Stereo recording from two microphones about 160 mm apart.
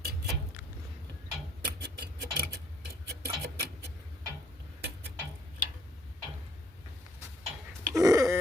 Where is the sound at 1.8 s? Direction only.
90° right.